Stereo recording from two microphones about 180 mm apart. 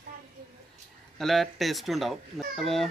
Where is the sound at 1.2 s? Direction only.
Centre (ahead or behind).